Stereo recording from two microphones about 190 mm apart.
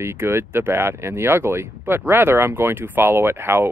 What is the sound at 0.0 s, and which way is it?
Speech, 15° right (ahead or behind).